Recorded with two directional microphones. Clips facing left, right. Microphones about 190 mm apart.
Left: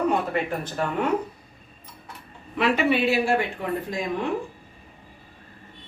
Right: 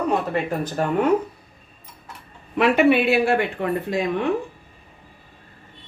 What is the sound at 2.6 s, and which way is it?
Speech, 55° right (ahead or behind).